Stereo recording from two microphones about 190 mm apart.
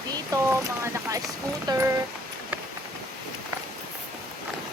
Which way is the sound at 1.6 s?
20° right (ahead or behind).